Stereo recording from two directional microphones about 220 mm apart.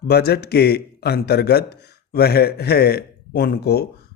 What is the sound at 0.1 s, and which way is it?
A man's voice, 45° left (ahead or behind).